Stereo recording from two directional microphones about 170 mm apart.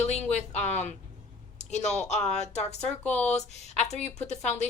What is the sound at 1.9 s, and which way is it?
Speech, 40° left (ahead or behind).